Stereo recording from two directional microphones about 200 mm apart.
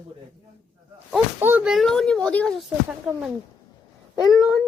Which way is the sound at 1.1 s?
10° right (ahead or behind).